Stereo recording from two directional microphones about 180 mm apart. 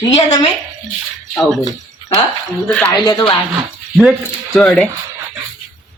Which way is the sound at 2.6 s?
5° left (ahead or behind).